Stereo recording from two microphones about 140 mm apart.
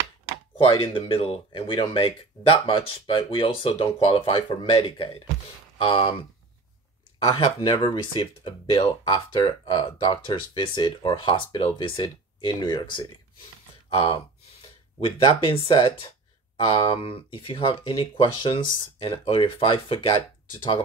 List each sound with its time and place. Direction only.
0.7 s speech: 40° left (ahead or behind)
7.2 s speech: 35° left (ahead or behind)
15.0 s speech: 35° left (ahead or behind)